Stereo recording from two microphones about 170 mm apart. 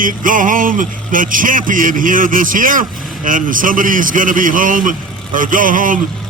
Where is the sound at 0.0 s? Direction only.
50° right (ahead or behind).